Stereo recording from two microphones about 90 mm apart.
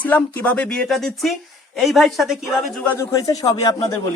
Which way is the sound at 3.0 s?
40° left (ahead or behind).